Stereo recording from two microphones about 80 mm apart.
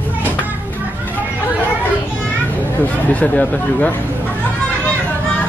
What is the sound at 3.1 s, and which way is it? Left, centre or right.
Speech, centre.